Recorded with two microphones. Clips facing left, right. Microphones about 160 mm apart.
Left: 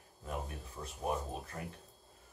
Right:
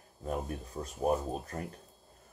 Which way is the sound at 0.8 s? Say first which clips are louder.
Right 5 dB; 30° right (ahead or behind).